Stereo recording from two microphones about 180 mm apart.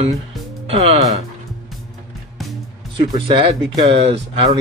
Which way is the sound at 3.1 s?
30° right (ahead or behind).